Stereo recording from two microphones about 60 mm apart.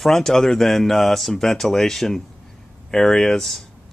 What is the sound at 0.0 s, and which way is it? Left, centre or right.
Speech, centre.